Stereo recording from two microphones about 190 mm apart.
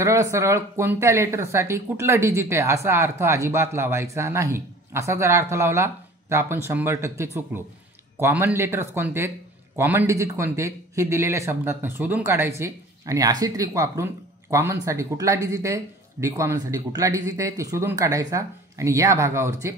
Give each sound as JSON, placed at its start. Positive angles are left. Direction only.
{"t": 0.0, "sound": "a man's voice", "side_deg": -15}